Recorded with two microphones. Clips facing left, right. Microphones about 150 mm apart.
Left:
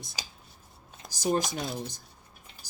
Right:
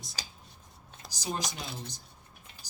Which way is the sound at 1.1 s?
50° left (ahead or behind).